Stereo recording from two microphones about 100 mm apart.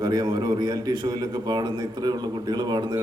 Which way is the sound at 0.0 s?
45° right (ahead or behind).